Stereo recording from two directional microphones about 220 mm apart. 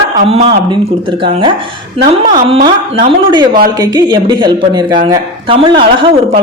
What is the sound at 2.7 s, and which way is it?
A woman's voice, 25° right (ahead or behind).